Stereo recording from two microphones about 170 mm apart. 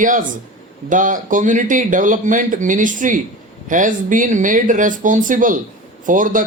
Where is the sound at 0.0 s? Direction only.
50° right (ahead or behind).